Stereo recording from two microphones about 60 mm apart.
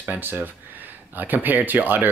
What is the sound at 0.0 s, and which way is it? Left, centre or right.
Speech, right.